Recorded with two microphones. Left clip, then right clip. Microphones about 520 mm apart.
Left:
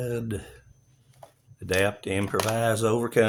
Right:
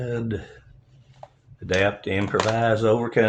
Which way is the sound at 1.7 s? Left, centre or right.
Left.